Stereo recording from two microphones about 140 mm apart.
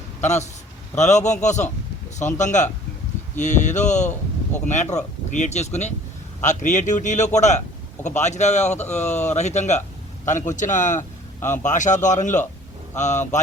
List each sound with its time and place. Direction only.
0.2 s a man's voice: 55° left (ahead or behind)
11.3 s speech: 15° left (ahead or behind)
11.6 s speech: 60° left (ahead or behind)